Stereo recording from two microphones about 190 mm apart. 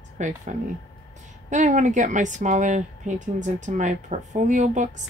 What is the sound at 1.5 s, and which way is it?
Speech, 40° right (ahead or behind).